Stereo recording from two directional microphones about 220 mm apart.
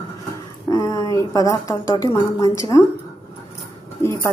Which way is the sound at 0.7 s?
15° left (ahead or behind).